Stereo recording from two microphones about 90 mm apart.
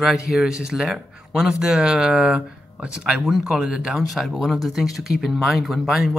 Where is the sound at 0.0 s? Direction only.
5° right (ahead or behind).